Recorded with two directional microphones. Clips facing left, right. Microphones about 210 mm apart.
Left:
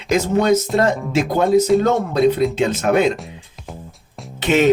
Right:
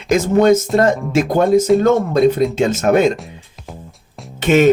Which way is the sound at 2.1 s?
45° right (ahead or behind).